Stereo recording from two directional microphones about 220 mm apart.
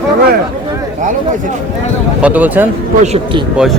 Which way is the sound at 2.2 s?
5° right (ahead or behind).